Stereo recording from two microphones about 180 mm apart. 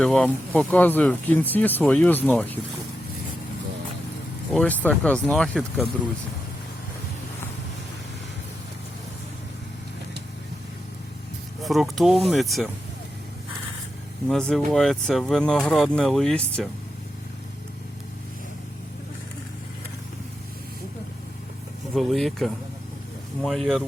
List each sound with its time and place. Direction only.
0.0 s speech: 5° left (ahead or behind)
4.5 s speech: 10° left (ahead or behind)
11.6 s speech: centre (ahead or behind)
14.3 s speech: 5° left (ahead or behind)
21.9 s speech: centre (ahead or behind)